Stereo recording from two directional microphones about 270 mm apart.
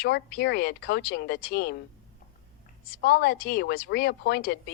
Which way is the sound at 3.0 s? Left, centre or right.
Left.